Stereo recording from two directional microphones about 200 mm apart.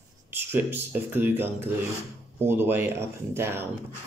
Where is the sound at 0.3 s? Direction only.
10° right (ahead or behind).